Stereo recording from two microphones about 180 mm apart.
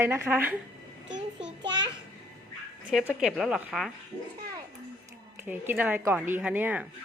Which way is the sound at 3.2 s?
5° right (ahead or behind).